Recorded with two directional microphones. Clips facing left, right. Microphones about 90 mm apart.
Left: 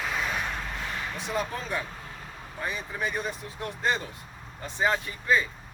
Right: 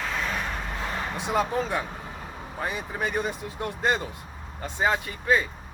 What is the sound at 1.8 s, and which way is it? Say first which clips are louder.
Vehicle: right 4 dB; 20° right (ahead or behind).